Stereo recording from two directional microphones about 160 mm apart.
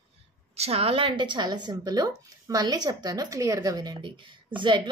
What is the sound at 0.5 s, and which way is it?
A woman's voice, 40° right (ahead or behind).